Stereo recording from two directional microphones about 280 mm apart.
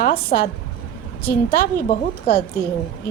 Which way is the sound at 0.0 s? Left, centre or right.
Left.